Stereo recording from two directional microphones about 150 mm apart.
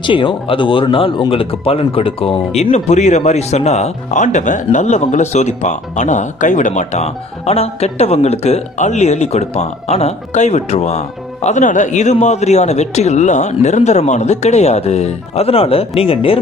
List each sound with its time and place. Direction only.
0.0 s speech: 35° left (ahead or behind)